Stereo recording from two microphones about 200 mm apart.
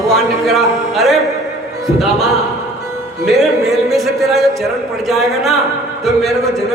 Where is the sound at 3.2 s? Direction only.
Centre (ahead or behind).